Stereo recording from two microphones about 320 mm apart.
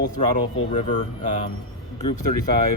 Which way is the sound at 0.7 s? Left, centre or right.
Left.